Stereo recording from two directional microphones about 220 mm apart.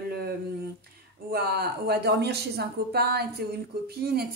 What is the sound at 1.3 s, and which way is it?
Speech, 45° right (ahead or behind).